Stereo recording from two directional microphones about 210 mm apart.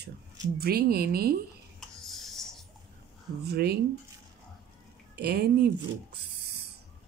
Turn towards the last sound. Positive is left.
turn(degrees=-50)  # may be behind; listen again after turning